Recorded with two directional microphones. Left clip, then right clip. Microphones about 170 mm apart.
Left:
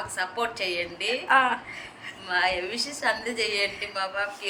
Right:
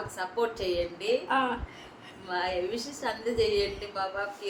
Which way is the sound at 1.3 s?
5° left (ahead or behind).